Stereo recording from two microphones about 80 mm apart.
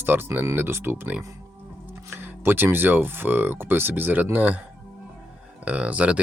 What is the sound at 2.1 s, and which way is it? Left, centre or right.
Speech, right.